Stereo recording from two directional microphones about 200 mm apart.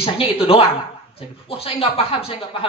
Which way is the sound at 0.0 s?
30° left (ahead or behind).